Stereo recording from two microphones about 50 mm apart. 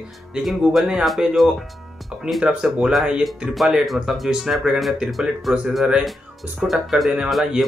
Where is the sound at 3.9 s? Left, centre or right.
Centre.